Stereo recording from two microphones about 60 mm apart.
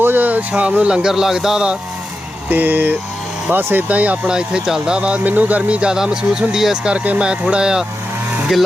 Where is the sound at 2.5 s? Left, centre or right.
Right.